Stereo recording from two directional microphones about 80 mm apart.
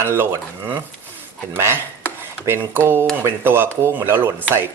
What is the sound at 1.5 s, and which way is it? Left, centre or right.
Speech, right.